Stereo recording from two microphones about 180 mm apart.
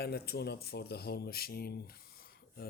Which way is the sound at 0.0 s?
60° left (ahead or behind).